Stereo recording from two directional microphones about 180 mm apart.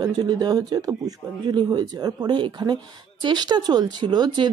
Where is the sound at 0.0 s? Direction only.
20° right (ahead or behind).